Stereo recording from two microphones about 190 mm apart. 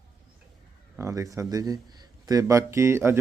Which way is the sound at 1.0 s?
15° right (ahead or behind).